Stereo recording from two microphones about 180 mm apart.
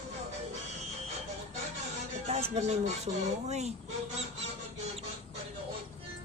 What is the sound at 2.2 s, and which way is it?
Speech, 35° right (ahead or behind).